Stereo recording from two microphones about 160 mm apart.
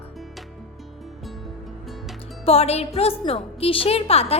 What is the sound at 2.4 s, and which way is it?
A woman's voice, 40° left (ahead or behind).